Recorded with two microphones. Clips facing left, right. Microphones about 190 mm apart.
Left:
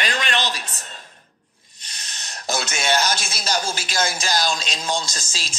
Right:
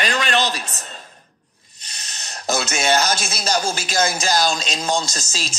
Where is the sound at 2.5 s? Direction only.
40° right (ahead or behind).